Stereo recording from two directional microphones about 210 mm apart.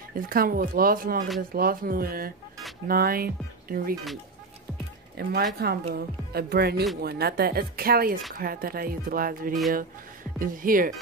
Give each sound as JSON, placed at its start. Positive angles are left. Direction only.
{"t": 0.1, "sound": "speech", "side_deg": -45}
{"t": 5.1, "sound": "speech", "side_deg": -50}